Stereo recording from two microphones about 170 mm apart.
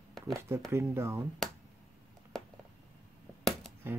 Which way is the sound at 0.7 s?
15° right (ahead or behind).